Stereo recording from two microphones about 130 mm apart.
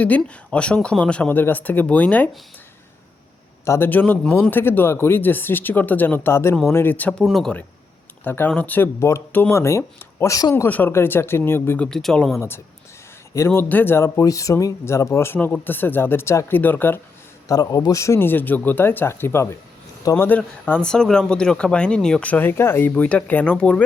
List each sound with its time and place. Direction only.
0.0 s speech: 10° left (ahead or behind)
3.7 s speech: 15° left (ahead or behind)
7.1 s speech: centre (ahead or behind)
8.2 s speech: 15° left (ahead or behind)
10.5 s speech: 15° left (ahead or behind)
11.9 s speech: 5° left (ahead or behind)
12.4 s speech: 20° left (ahead or behind)
17.5 s speech: 30° left (ahead or behind); by 23.8 s 10° left (ahead or behind)